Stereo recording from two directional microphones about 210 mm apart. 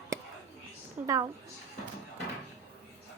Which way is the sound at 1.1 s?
15° right (ahead or behind).